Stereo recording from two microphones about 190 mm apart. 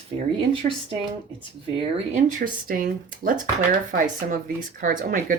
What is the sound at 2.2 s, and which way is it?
Speech, 45° right (ahead or behind).